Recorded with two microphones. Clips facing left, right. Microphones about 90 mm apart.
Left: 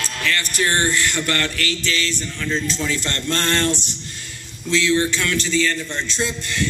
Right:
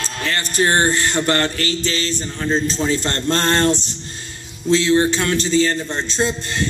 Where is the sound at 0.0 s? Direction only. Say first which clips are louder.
Even; 35° right (ahead or behind).